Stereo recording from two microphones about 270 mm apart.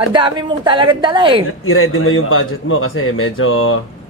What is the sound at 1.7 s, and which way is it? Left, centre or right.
Speech, left.